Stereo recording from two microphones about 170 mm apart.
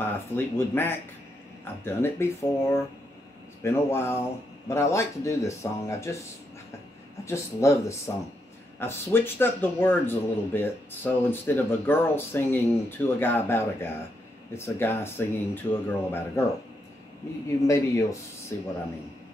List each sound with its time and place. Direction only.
0.0 s speech: 15° left (ahead or behind)
7.2 s speech: 15° left (ahead or behind)
17.6 s speech: 20° left (ahead or behind)